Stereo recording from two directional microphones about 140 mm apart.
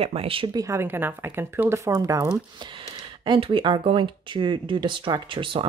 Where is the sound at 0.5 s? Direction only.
25° right (ahead or behind).